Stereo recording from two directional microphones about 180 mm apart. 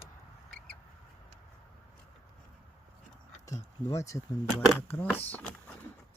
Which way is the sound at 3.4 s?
20° left (ahead or behind).